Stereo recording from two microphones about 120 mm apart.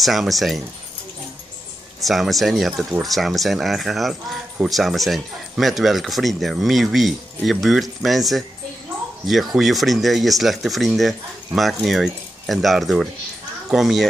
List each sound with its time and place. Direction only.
0.0 s speech: centre (ahead or behind)
2.0 s speech: centre (ahead or behind)